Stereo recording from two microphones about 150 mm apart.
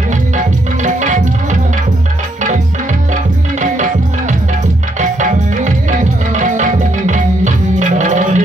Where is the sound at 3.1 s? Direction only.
55° right (ahead or behind).